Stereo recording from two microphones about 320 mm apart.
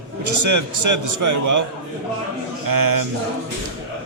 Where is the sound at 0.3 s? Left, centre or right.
Right.